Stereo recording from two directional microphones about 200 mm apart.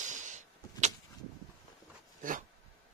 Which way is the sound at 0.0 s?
40° right (ahead or behind).